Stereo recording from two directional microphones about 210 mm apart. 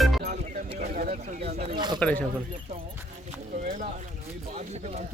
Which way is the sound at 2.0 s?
5° left (ahead or behind).